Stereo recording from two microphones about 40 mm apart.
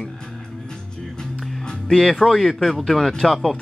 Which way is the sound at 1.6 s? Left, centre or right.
Centre.